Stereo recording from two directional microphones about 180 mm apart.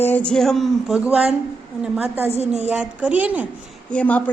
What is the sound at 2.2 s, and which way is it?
Speech, 35° right (ahead or behind).